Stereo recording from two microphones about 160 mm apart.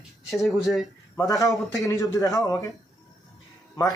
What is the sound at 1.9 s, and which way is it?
Speech, 20° left (ahead or behind).